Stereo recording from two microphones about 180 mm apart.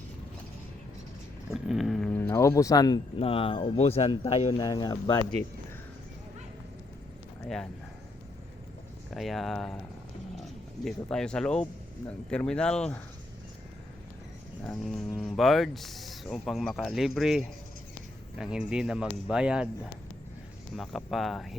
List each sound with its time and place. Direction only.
1.5 s speech: centre (ahead or behind); by 3.0 s 20° left (ahead or behind)
3.2 s speech: 30° left (ahead or behind)
4.6 s speech: 20° left (ahead or behind)
7.4 s speech: 5° left (ahead or behind)
9.1 s speech: centre (ahead or behind)
10.8 s speech: 5° left (ahead or behind)
14.6 s speech: centre (ahead or behind)